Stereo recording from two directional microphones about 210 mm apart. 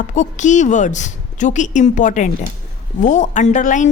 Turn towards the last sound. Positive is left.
turn(degrees=35)  # may be behind; listen again after turning